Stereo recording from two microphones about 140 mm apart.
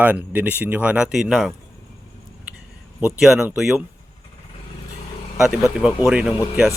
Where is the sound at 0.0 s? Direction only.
10° right (ahead or behind).